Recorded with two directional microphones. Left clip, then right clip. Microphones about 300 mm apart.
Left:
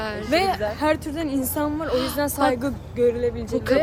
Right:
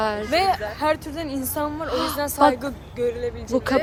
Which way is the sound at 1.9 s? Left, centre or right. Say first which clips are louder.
Even; centre.